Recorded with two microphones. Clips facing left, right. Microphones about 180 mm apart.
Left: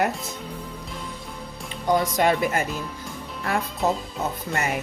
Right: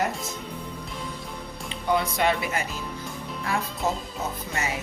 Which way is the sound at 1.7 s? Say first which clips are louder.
Left 3 dB; 40° left (ahead or behind).